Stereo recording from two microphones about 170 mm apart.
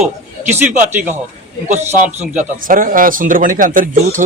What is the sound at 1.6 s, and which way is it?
Speech, 45° right (ahead or behind).